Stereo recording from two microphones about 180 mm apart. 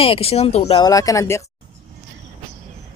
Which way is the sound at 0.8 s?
20° left (ahead or behind).